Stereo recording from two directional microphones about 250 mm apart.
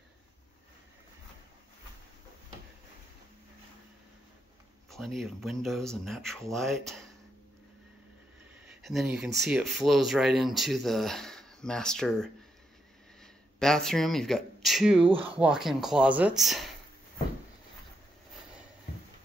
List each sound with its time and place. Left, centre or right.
4.9 s speech: centre
8.8 s speech: centre
13.2 s a sound: centre
15.0 s speech: right
15.3 s speech: centre